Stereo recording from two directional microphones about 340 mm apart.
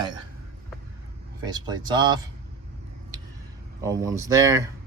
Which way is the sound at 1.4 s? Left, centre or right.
Centre.